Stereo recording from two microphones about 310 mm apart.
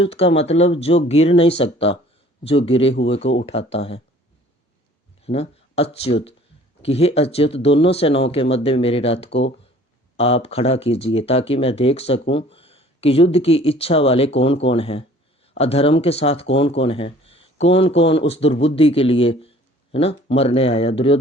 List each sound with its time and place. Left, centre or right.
0.0 s speech: centre
5.2 s speech: centre